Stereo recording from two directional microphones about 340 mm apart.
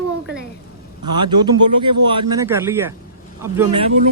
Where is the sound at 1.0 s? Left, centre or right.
Centre.